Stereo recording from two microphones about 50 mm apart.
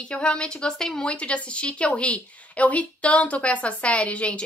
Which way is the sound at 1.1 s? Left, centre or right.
Left.